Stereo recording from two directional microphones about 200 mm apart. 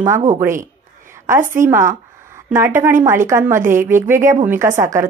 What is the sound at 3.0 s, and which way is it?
A woman's voice, 15° right (ahead or behind).